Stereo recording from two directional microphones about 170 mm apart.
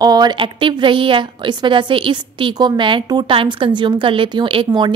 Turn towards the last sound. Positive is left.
turn(degrees=-30)  # may be behind; listen again after turning